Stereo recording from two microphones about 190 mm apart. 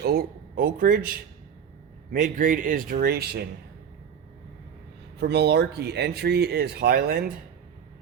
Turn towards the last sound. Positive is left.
turn(degrees=-55)  # may be behind; listen again after turning